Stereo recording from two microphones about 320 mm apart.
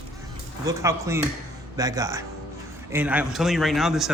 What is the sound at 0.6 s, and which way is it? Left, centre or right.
Speech, centre.